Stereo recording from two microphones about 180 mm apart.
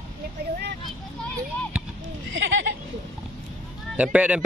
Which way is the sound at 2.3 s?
90° right.